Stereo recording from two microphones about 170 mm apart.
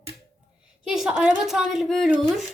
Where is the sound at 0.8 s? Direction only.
5° right (ahead or behind).